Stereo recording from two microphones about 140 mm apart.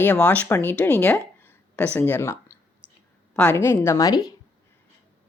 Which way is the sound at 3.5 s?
20° left (ahead or behind).